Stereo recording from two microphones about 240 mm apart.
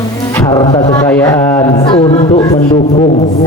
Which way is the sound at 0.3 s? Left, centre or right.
Centre.